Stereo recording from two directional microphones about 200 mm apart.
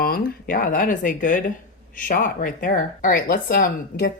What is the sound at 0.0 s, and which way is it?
Speech, 45° left (ahead or behind).